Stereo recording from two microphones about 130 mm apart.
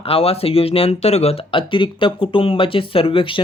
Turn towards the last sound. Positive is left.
turn(degrees=40)  # may be behind; listen again after turning